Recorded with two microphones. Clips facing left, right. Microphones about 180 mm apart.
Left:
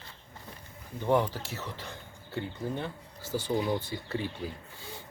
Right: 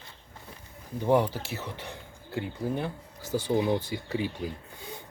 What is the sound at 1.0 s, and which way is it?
Speech, 15° right (ahead or behind).